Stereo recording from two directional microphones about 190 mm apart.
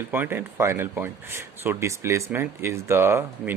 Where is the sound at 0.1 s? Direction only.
10° right (ahead or behind).